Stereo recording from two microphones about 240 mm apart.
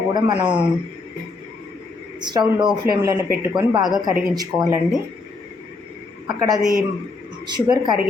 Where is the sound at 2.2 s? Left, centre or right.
Centre.